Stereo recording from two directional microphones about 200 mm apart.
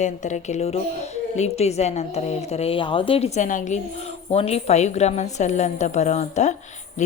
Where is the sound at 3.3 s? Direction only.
40° left (ahead or behind).